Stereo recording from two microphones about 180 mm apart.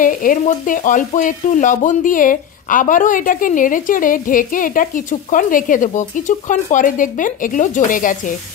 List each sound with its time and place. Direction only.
0.0 s speech: 50° left (ahead or behind)